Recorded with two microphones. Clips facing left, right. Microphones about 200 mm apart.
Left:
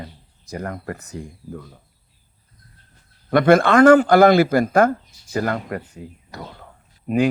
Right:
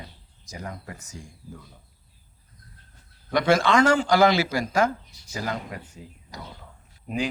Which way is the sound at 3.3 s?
55° left (ahead or behind).